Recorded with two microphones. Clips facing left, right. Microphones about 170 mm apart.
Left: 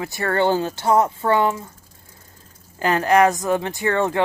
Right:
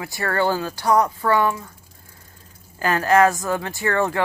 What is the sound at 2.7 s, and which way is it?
Speech, 20° left (ahead or behind).